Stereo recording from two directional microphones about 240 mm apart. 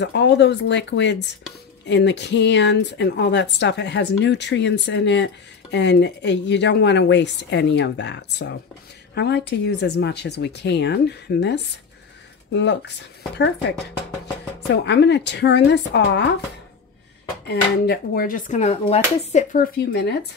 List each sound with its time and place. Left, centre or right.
0.0 s speech: left
14.7 s speech: left
17.5 s speech: left